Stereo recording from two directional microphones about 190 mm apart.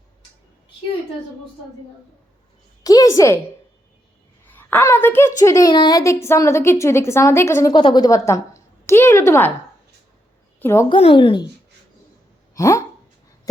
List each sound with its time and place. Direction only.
2.8 s a woman's voice: 20° left (ahead or behind)
4.4 s a sound: 10° left (ahead or behind)
5.4 s a woman's voice: 15° left (ahead or behind)
10.6 s a woman's voice: 15° left (ahead or behind)
10.8 s a woman's voice: 25° left (ahead or behind)
12.5 s speech: 15° left (ahead or behind)